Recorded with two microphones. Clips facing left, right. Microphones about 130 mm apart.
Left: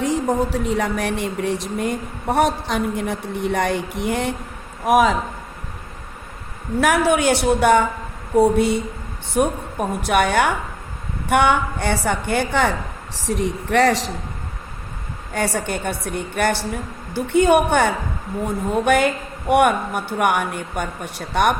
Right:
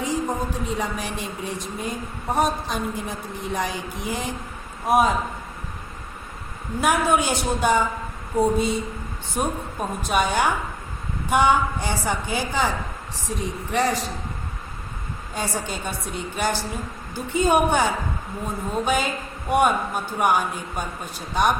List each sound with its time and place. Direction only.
0.0 s speech: 75° left (ahead or behind)
4.9 s a man's voice: 90° left
6.7 s a woman's voice: 75° left (ahead or behind)
15.3 s a woman's voice: 65° left (ahead or behind)